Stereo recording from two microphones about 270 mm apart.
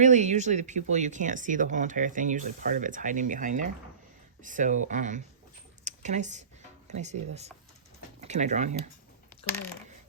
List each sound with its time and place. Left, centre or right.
0.0 s speech: right
5.8 s a sound: right
6.8 s speech: right